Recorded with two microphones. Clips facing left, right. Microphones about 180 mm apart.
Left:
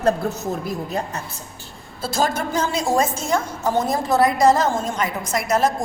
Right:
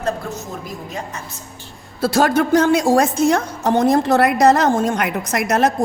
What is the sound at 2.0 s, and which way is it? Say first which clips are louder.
Speech: right 7 dB; 65° right (ahead or behind).